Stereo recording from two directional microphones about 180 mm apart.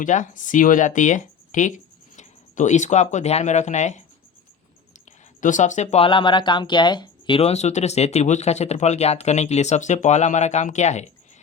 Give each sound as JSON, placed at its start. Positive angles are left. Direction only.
{"t": 0.0, "sound": "speech", "side_deg": 45}
{"t": 5.4, "sound": "speech", "side_deg": 45}